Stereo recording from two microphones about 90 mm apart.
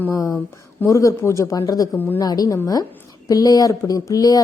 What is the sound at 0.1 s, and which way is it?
A woman's voice, 40° left (ahead or behind).